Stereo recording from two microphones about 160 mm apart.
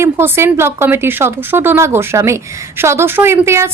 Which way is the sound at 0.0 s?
15° right (ahead or behind).